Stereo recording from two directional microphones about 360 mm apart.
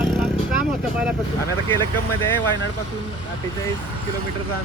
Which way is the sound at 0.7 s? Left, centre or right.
Centre.